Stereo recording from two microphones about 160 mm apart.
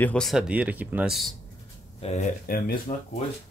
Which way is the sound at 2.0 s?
40° left (ahead or behind).